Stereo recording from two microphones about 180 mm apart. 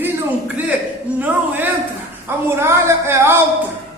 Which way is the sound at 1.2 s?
10° right (ahead or behind).